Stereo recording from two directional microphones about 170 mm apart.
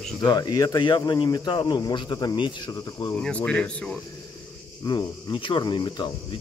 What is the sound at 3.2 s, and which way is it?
Speech, 5° left (ahead or behind).